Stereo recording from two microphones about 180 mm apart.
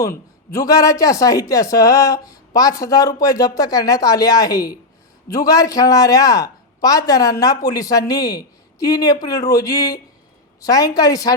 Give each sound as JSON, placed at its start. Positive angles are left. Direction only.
{"t": 0.0, "sound": "a man's voice", "side_deg": 15}